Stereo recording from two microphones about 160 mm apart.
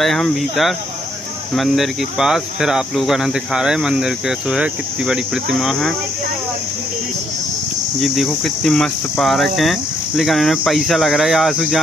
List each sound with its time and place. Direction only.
0.0 s speech: centre (ahead or behind)
8.0 s speech: centre (ahead or behind)